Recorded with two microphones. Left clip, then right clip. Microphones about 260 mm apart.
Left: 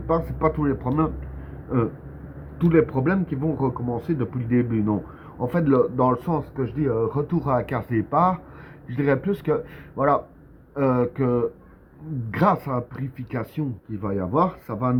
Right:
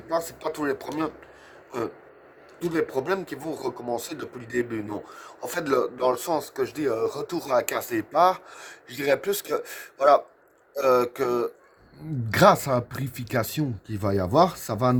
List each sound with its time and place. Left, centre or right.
0.1 s speech: right
2.7 s speech: right